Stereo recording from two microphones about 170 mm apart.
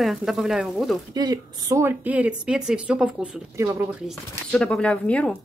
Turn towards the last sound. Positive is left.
turn(degrees=5)  # may be behind; listen again after turning